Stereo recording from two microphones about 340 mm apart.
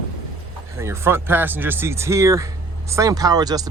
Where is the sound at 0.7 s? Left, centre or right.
Centre.